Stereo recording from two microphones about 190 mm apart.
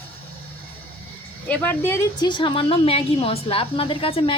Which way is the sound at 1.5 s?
10° left (ahead or behind).